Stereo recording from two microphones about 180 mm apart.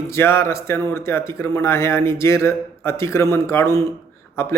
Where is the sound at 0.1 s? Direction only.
15° left (ahead or behind).